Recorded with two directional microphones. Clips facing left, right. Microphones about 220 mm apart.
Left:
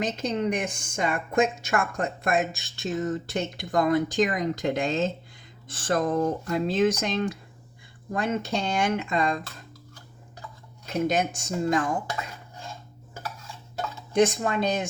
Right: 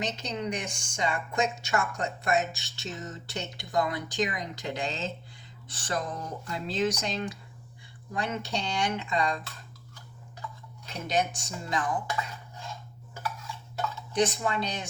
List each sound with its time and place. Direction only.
0.0 s a woman's voice: 50° left (ahead or behind)
10.8 s a woman's voice: 45° left (ahead or behind)
14.1 s a woman's voice: 45° left (ahead or behind)